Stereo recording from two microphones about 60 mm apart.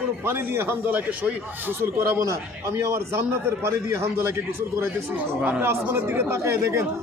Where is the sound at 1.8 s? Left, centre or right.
Right.